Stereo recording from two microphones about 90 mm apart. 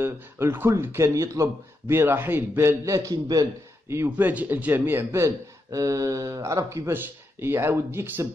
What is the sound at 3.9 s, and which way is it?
Speech, 25° right (ahead or behind).